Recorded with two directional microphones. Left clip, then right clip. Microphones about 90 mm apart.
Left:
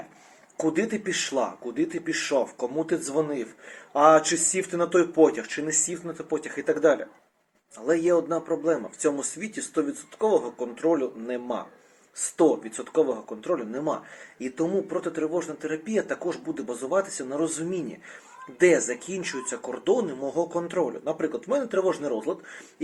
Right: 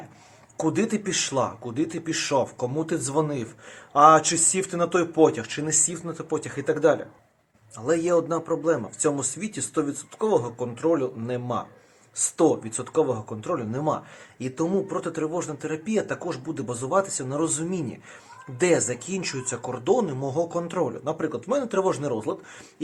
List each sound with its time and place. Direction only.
0.6 s speech: 30° right (ahead or behind)
5.7 s speech: 40° right (ahead or behind)
15.8 s speech: 20° right (ahead or behind)